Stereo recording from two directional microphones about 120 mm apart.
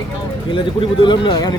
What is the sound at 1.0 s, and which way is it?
Speech, 40° left (ahead or behind).